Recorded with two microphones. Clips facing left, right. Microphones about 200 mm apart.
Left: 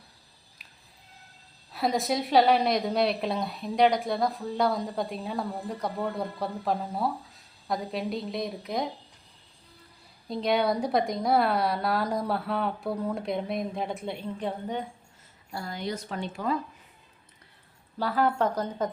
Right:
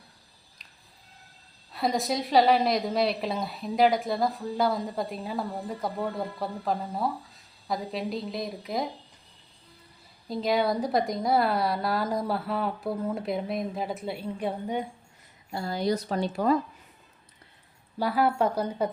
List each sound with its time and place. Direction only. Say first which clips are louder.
1.7 s a woman's voice: even; centre (ahead or behind)
10.2 s a woman's voice: even; centre (ahead or behind)
15.5 s a woman's voice: right 6 dB; 30° right (ahead or behind)
18.0 s speech: right 1 dB; 10° right (ahead or behind)